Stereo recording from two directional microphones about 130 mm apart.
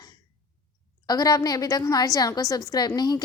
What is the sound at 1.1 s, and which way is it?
A woman's voice, 30° left (ahead or behind).